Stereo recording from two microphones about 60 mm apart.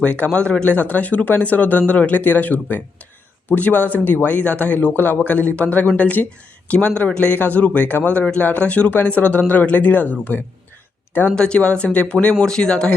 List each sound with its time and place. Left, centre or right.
0.0 s speech: left
11.3 s speech: centre